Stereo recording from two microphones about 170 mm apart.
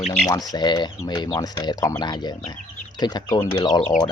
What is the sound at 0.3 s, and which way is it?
Speech, 20° left (ahead or behind).